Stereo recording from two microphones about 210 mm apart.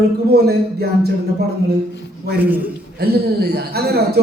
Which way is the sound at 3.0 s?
50° right (ahead or behind).